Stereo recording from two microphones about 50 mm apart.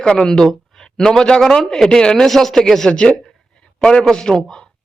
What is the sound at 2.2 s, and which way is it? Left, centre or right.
A man's voice, centre.